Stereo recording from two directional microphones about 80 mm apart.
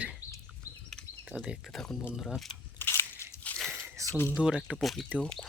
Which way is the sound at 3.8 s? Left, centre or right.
Right.